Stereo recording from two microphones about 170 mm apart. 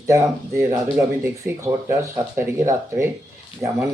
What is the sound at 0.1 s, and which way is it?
Speech, 15° right (ahead or behind).